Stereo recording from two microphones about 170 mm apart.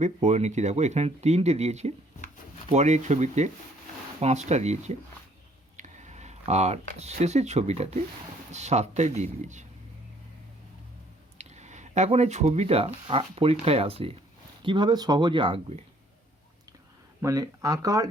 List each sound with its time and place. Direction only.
0.0 s speech: 45° right (ahead or behind)
5.7 s a sound: 45° right (ahead or behind)
7.0 s speech: 40° right (ahead or behind)
11.3 s speech: 40° right (ahead or behind)
17.2 s speech: 20° right (ahead or behind)